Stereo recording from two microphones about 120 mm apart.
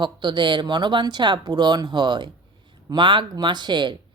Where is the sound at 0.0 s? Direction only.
40° right (ahead or behind).